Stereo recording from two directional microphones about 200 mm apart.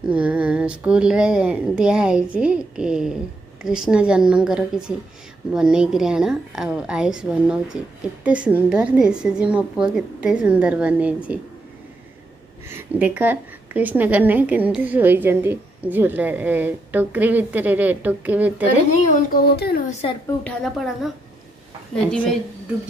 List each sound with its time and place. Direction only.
0.1 s a woman's voice: 5° right (ahead or behind)
12.6 s a woman's voice: 10° right (ahead or behind)
19.1 s speech: 45° left (ahead or behind)
19.9 s a woman's voice: 30° left (ahead or behind)
20.4 s a woman's voice: centre (ahead or behind)